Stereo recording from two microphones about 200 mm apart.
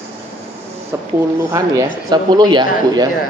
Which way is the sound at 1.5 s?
20° right (ahead or behind).